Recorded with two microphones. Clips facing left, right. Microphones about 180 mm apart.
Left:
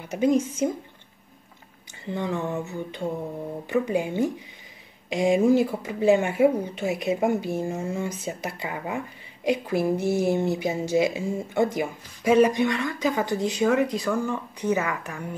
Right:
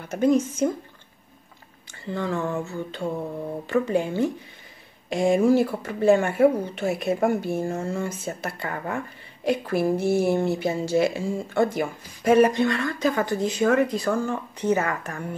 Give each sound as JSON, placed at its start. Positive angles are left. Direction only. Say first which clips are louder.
{"t": 0.0, "sound": "speech", "louder": "right 1 dB", "side_deg": 15}
{"t": 2.1, "sound": "a sound", "louder": "right 1 dB", "side_deg": 20}
{"t": 3.6, "sound": "speech", "louder": "right 1 dB", "side_deg": 15}